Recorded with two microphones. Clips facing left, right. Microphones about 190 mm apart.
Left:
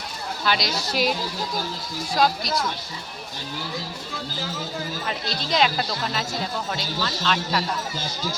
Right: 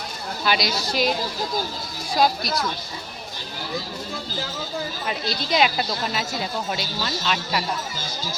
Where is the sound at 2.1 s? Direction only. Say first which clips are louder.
Right 1 dB; 5° right (ahead or behind).